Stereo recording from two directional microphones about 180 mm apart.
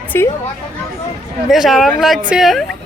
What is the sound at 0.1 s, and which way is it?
Speech, 10° left (ahead or behind).